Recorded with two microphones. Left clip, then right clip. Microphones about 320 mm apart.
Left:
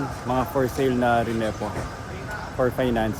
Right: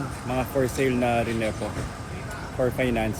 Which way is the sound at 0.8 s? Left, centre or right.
Left.